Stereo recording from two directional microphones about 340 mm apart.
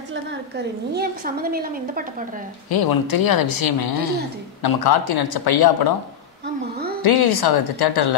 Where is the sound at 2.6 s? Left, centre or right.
Left.